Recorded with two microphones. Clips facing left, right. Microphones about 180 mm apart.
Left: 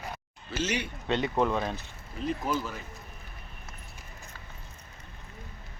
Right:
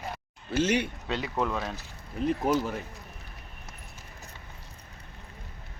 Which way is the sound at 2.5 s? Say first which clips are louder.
Right 5 dB; 70° right (ahead or behind).